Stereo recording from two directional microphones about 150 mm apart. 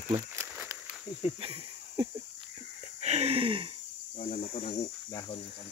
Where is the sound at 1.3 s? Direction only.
40° right (ahead or behind).